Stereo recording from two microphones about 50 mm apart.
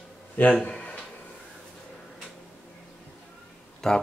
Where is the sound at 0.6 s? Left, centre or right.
Left.